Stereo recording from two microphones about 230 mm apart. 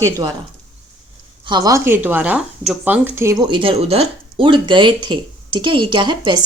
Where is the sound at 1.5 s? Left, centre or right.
Centre.